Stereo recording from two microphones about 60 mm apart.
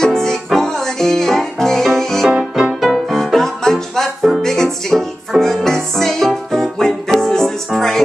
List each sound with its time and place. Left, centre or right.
0.0 s music: centre
2.2 s music: centre
2.8 s music: centre